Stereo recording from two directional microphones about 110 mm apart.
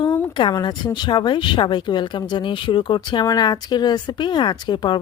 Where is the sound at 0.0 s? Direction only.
45° left (ahead or behind).